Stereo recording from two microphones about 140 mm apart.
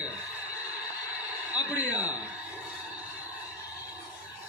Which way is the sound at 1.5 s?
10° right (ahead or behind).